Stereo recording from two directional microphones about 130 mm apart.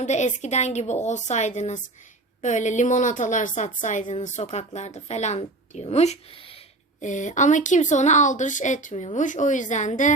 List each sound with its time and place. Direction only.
0.0 s a woman's voice: 65° left (ahead or behind); by 6.6 s 45° left (ahead or behind)
7.0 s a woman's voice: 75° left (ahead or behind)